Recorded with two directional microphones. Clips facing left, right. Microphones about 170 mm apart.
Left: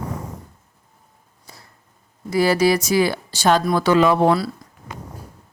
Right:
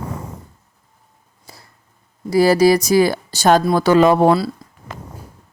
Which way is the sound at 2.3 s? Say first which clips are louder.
Right 4 dB; 35° right (ahead or behind).